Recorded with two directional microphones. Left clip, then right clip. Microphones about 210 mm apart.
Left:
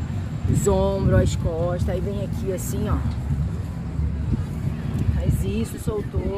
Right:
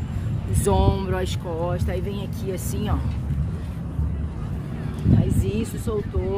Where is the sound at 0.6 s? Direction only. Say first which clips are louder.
Left 1 dB; 30° right (ahead or behind).